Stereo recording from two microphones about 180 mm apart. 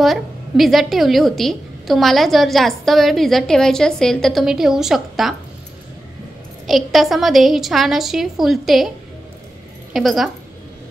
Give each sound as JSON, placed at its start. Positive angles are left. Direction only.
{"t": 0.0, "sound": "a woman's voice", "side_deg": 0}
{"t": 6.7, "sound": "a woman's voice", "side_deg": 0}
{"t": 9.9, "sound": "a woman's voice", "side_deg": 0}